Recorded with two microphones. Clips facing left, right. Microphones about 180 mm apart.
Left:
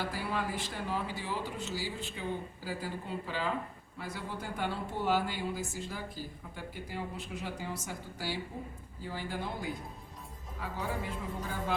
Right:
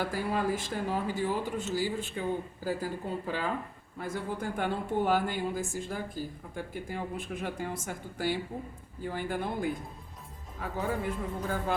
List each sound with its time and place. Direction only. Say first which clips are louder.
0.0 s speech: right 5 dB; 45° right (ahead or behind)